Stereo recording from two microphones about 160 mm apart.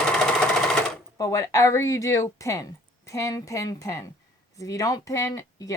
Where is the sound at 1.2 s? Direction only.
20° left (ahead or behind).